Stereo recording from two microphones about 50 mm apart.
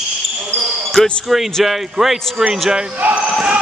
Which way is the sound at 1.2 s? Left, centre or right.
Centre.